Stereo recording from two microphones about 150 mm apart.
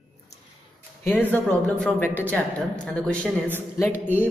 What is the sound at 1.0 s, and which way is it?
Speech, 10° left (ahead or behind).